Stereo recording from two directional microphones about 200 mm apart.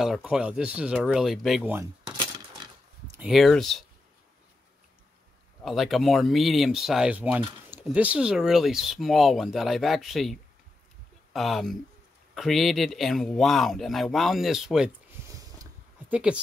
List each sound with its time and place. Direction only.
0.0 s speech: centre (ahead or behind)
2.0 s coin: 20° right (ahead or behind)
3.2 s speech: centre (ahead or behind)
5.6 s speech: centre (ahead or behind)
11.3 s speech: centre (ahead or behind)
16.1 s a woman's voice: 5° right (ahead or behind)